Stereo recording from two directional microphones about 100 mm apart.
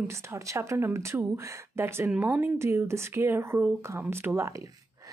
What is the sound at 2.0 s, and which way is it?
Speech, 15° right (ahead or behind).